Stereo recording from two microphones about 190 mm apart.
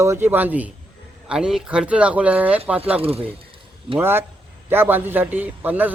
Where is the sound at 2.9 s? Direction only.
30° right (ahead or behind).